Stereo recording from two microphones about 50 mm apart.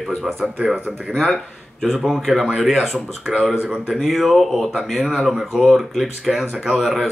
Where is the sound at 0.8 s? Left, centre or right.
Centre.